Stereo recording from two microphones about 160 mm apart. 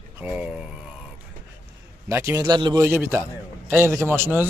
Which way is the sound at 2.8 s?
15° right (ahead or behind).